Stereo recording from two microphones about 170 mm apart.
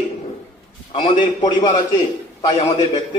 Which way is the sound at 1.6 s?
25° left (ahead or behind).